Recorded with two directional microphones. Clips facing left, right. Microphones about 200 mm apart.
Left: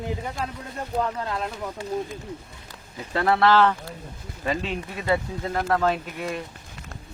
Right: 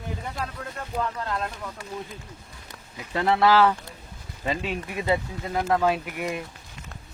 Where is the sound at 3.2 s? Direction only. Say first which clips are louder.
Even; 10° right (ahead or behind).